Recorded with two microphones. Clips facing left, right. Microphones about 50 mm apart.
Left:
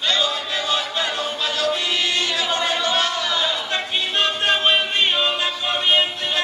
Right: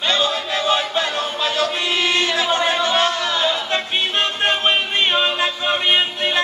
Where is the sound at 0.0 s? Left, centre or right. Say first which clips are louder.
Right 2 dB; right.